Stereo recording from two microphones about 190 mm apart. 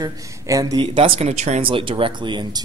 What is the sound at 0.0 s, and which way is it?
Speech, 20° right (ahead or behind).